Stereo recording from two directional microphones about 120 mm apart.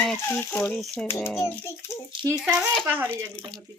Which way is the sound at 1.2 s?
20° left (ahead or behind).